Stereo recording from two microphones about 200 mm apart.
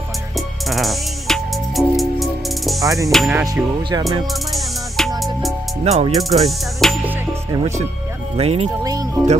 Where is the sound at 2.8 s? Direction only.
15° right (ahead or behind).